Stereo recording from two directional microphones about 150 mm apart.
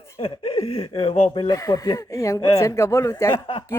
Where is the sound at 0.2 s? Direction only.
40° left (ahead or behind).